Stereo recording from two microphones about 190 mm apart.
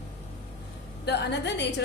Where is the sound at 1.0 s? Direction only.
65° left (ahead or behind).